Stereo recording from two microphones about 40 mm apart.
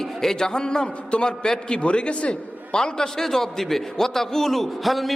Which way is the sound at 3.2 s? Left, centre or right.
Centre.